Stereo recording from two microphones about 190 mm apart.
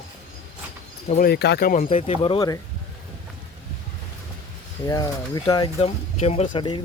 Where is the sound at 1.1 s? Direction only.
50° left (ahead or behind).